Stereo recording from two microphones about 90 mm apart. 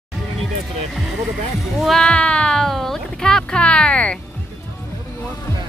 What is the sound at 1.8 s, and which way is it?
Cat, 5° left (ahead or behind).